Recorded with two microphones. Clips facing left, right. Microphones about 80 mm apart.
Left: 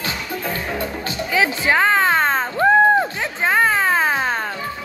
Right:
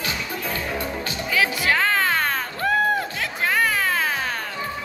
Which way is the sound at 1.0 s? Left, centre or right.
Left.